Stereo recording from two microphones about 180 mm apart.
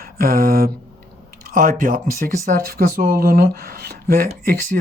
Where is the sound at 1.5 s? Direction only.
50° right (ahead or behind).